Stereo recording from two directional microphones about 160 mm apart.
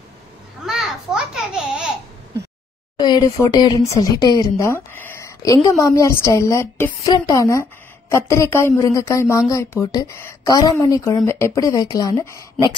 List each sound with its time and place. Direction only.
0.7 s babbling: centre (ahead or behind)
3.0 s a woman's voice: 25° left (ahead or behind)